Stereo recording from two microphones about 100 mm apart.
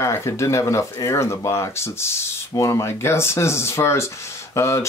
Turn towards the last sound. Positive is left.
turn(degrees=30)  # may be behind; listen again after turning